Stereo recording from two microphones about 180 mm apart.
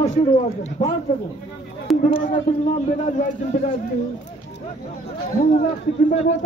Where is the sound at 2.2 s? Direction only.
45° left (ahead or behind).